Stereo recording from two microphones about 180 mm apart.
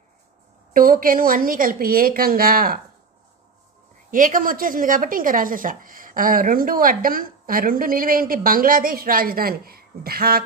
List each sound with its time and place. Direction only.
0.7 s speech: 50° right (ahead or behind)
4.1 s speech: 50° right (ahead or behind)